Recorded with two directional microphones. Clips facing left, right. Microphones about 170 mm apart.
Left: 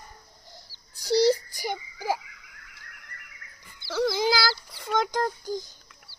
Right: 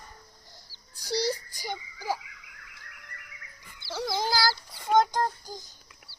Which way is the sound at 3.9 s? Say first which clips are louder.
Left 5 dB; 70° left (ahead or behind).